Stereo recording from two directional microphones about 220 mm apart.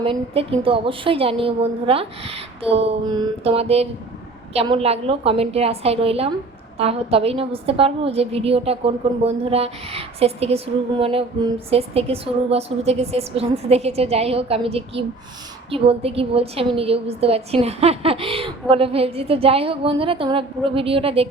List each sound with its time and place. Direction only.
0.0 s a woman's voice: 25° right (ahead or behind)